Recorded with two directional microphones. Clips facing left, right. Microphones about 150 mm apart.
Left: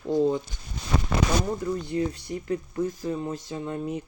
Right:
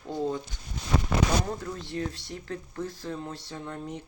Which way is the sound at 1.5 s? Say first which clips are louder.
Left 6 dB; 10° left (ahead or behind).